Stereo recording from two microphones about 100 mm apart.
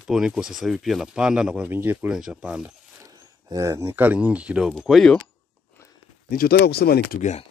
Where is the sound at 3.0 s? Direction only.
40° right (ahead or behind).